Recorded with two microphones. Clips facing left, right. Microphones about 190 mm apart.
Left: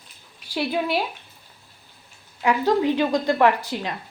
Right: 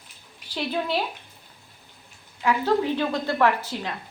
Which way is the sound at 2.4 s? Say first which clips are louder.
Left 2 dB; 15° left (ahead or behind).